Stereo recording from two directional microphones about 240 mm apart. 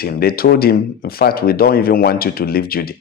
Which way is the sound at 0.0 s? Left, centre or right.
Left.